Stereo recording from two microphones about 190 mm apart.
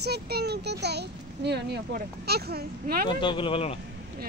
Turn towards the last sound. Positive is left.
turn(degrees=30)  # may be behind; listen again after turning